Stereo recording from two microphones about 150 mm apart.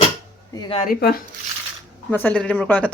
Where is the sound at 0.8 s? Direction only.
80° left.